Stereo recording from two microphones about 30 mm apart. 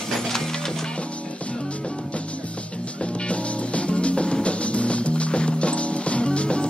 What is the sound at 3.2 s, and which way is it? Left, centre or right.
Music, left.